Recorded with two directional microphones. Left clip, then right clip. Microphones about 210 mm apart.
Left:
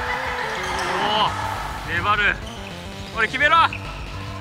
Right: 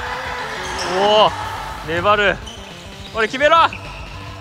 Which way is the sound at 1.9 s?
10° right (ahead or behind).